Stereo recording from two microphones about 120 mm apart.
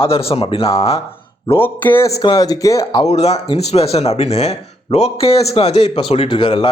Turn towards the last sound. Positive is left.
turn(degrees=50)  # may be behind; listen again after turning